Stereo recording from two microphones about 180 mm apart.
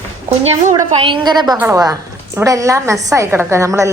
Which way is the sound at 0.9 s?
25° right (ahead or behind).